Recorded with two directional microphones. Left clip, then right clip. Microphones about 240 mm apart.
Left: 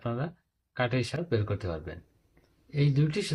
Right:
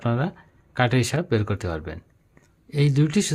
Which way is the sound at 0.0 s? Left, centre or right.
Right.